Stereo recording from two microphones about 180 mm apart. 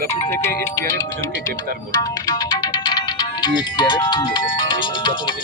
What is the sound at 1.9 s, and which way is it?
Music, 20° left (ahead or behind).